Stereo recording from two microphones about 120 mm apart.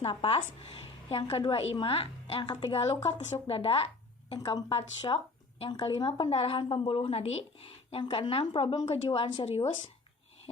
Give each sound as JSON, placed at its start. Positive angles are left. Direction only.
{"t": 0.0, "sound": "a woman's voice", "side_deg": 50}
{"t": 2.8, "sound": "a woman's voice", "side_deg": 70}
{"t": 3.4, "sound": "a woman's voice", "side_deg": 50}
{"t": 4.3, "sound": "a woman's voice", "side_deg": 35}
{"t": 4.7, "sound": "a woman's voice", "side_deg": 50}
{"t": 8.0, "sound": "a woman's voice", "side_deg": 40}